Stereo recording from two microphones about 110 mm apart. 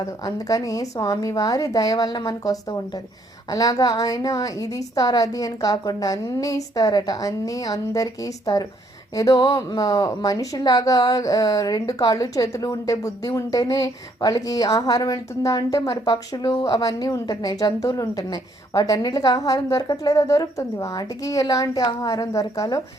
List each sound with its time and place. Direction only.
0.0 s a woman's voice: 30° left (ahead or behind)